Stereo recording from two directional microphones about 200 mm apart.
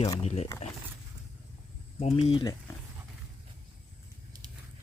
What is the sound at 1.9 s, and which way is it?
Speech, 30° left (ahead or behind).